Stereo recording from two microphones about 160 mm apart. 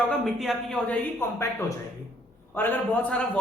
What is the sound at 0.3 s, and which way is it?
Speech, centre (ahead or behind).